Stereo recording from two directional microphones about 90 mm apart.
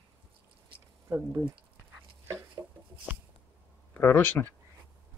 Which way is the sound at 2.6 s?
15° right (ahead or behind).